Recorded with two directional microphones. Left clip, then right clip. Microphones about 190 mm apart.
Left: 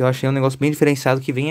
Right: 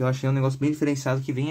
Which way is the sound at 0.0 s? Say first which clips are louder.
Left 8 dB; 50° left (ahead or behind).